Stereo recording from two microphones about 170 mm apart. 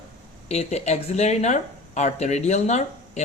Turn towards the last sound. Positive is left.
turn(degrees=45)  # may be behind; listen again after turning